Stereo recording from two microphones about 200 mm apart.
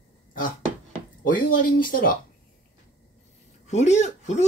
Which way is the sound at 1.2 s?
45° left (ahead or behind).